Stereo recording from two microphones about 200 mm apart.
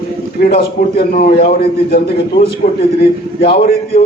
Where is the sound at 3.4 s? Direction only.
50° left (ahead or behind).